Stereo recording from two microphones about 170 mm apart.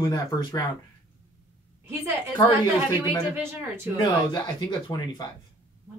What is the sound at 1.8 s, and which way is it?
Speech, 15° right (ahead or behind).